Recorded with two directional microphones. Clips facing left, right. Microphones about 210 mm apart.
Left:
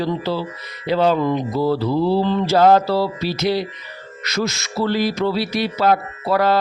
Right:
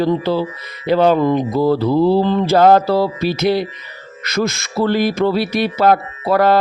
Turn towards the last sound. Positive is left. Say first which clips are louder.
# right 4 dB
turn(degrees=-55)  # may be behind; listen again after turning